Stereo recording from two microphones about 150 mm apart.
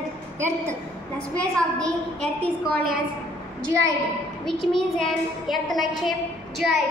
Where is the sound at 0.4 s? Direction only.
15° right (ahead or behind).